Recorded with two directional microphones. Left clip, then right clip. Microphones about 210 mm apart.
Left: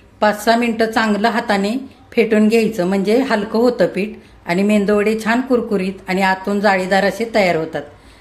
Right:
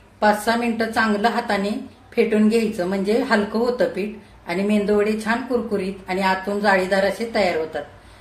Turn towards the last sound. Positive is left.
turn(degrees=35)  # may be behind; listen again after turning